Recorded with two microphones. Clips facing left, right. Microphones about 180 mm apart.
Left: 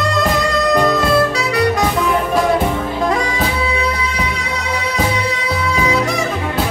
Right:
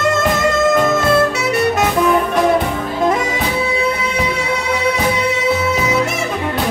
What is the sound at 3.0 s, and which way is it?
Music, 20° right (ahead or behind).